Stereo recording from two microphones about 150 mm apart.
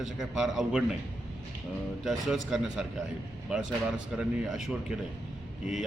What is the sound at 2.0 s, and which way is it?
Speech, centre (ahead or behind).